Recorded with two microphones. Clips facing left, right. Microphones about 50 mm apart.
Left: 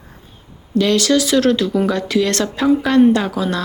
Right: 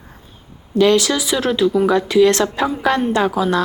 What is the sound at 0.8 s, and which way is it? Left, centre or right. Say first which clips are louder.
Speech: right 1 dB; right.